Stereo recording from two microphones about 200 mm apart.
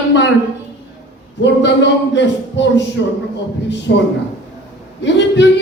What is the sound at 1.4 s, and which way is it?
Speech, 60° left (ahead or behind).